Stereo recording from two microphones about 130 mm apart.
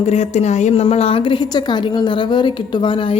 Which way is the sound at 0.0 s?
60° left (ahead or behind).